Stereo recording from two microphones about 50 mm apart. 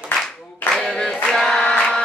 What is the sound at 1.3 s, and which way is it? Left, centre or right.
Choir, centre.